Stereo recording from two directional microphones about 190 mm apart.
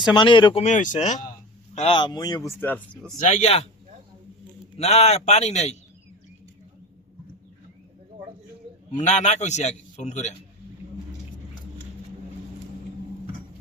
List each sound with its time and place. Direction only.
0.0 s speech: 25° left (ahead or behind)
0.6 s a man's voice: 40° left (ahead or behind); by 2.4 s 20° left (ahead or behind)
2.6 s speech: 10° left (ahead or behind)
3.2 s a man's voice: 35° left (ahead or behind)
4.8 s a man's voice: 35° left (ahead or behind)
8.9 s a man's voice: 40° left (ahead or behind)